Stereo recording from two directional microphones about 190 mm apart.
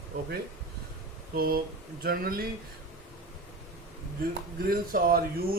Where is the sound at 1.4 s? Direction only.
50° right (ahead or behind).